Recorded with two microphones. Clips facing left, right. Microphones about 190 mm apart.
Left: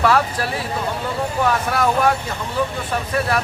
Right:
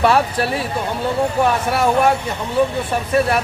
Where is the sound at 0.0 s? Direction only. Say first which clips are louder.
Right 2 dB; 25° right (ahead or behind).